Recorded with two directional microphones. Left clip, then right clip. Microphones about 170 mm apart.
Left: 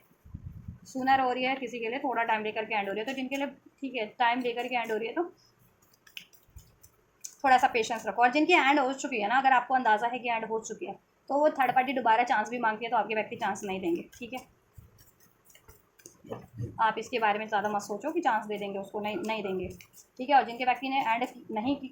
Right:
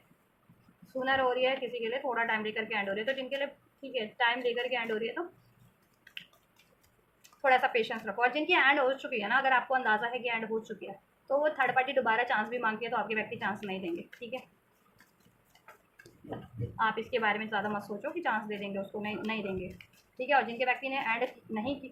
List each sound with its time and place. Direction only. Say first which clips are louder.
0.9 s a woman's voice: left 3 dB; 40° left (ahead or behind)
7.2 s a woman's voice: left 3 dB; 40° left (ahead or behind)
16.7 s a woman's voice: left 2 dB; 40° left (ahead or behind)